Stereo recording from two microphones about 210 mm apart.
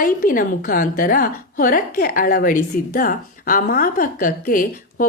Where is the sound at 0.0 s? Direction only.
40° left (ahead or behind).